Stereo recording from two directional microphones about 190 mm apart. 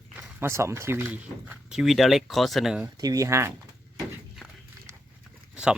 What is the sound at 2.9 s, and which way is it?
Speech, 20° right (ahead or behind).